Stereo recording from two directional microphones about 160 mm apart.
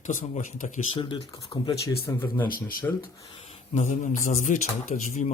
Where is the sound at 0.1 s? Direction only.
55° left (ahead or behind).